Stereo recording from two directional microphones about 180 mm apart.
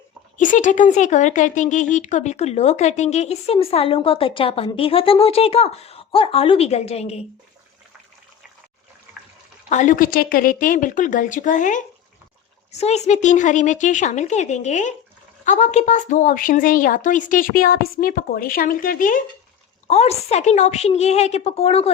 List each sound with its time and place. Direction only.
0.3 s speech: 45° left (ahead or behind)
9.6 s a woman's voice: 45° left (ahead or behind)
19.9 s speech: 35° left (ahead or behind)